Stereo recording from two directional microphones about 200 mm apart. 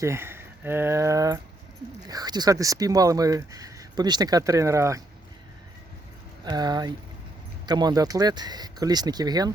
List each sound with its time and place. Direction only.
0.0 s speech: 10° right (ahead or behind)
6.4 s speech: 20° right (ahead or behind)